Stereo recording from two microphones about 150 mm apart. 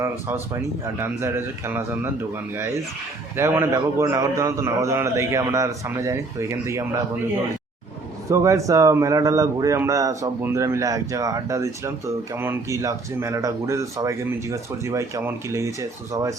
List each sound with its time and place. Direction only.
0.0 s a man's voice: 15° right (ahead or behind)
8.3 s a man's voice: 20° right (ahead or behind)